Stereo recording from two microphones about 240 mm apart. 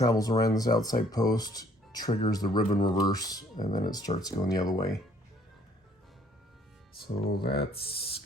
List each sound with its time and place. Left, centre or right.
0.0 s speech: centre
7.3 s speech: left
7.7 s speech: left